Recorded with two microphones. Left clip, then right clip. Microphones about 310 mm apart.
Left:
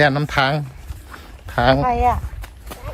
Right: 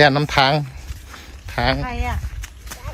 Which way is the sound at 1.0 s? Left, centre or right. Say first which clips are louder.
Left 1 dB; centre.